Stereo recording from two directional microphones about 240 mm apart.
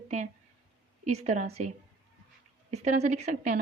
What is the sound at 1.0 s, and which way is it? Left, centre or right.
Speech, right.